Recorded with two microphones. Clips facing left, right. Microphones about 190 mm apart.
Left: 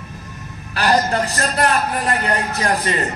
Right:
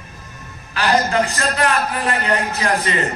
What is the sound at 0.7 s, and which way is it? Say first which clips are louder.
A man's voice: even; 40° left (ahead or behind).